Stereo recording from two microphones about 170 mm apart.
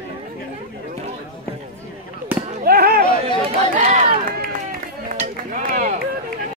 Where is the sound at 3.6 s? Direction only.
45° right (ahead or behind).